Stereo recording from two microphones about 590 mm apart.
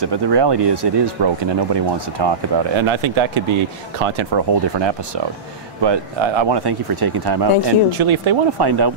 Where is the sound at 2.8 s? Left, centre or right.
Right.